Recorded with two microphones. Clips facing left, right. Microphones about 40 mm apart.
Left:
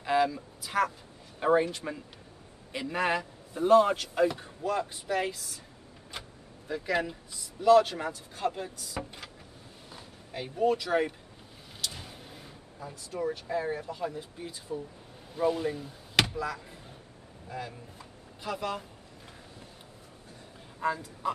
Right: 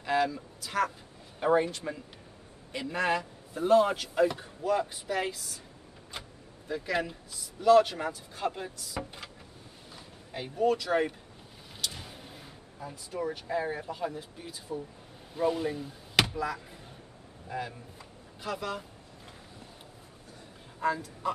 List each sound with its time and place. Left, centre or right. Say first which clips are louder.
0.0 s a man's voice: left 2 dB; centre
6.7 s speech: left 1 dB; centre
10.3 s speech: even; centre
11.8 s a sound: right 1 dB; centre
13.3 s speech: even; centre
17.9 s a sound: even; centre
20.8 s a man's voice: right 1 dB; centre